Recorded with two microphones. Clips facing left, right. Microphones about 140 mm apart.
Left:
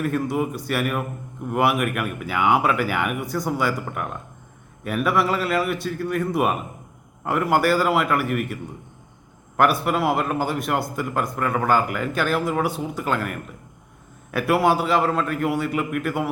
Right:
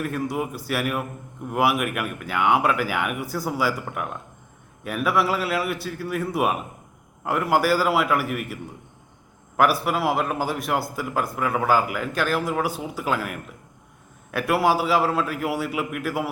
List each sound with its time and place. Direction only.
0.0 s a man's voice: centre (ahead or behind)
9.6 s a man's voice: centre (ahead or behind)